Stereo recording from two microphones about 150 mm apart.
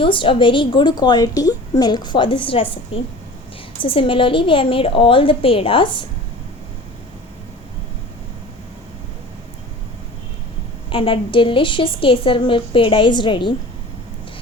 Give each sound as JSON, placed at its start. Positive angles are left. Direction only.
{"t": 0.0, "sound": "a woman's voice", "side_deg": 35}
{"t": 10.8, "sound": "a woman's voice", "side_deg": 35}